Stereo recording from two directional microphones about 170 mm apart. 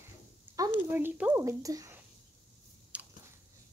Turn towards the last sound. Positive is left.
turn(degrees=-5)  # may be behind; listen again after turning